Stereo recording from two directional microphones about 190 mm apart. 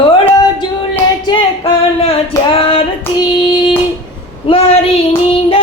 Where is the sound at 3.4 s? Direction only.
25° left (ahead or behind).